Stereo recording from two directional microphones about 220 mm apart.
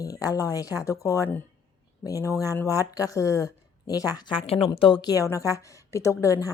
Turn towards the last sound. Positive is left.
turn(degrees=15)  # may be behind; listen again after turning